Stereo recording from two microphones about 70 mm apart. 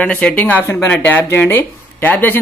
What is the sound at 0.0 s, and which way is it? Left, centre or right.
Speech, centre.